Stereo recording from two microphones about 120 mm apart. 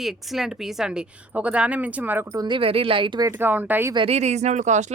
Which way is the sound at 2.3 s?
35° right (ahead or behind).